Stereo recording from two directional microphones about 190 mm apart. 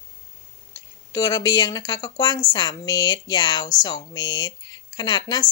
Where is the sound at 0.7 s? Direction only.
20° left (ahead or behind).